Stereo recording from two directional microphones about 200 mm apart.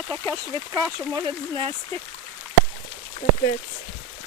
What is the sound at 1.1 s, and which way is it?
Speech, 20° right (ahead or behind).